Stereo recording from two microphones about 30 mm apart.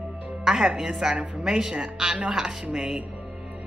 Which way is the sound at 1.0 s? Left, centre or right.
Centre.